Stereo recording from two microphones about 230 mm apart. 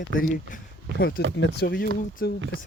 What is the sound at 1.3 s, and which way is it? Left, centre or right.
Speech, left.